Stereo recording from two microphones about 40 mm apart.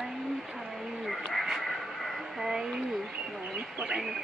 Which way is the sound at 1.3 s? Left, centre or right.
Centre.